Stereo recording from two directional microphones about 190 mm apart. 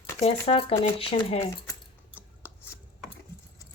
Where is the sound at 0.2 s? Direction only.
30° left (ahead or behind).